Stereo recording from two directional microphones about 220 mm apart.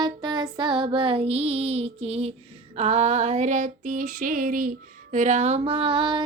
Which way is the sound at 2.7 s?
25° right (ahead or behind).